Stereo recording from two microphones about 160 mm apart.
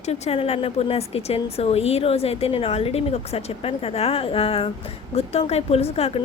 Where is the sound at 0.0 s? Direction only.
40° left (ahead or behind).